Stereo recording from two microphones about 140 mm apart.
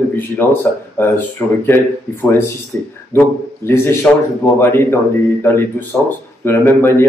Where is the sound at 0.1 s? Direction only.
15° left (ahead or behind).